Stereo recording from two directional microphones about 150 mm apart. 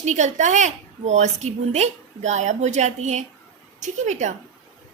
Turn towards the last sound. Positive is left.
turn(degrees=-50)  # may be behind; listen again after turning